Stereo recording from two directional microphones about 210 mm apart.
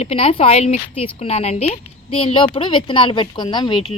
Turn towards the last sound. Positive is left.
turn(degrees=20)  # may be behind; listen again after turning